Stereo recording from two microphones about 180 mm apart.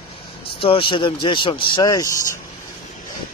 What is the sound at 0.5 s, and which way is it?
Speech, 30° left (ahead or behind).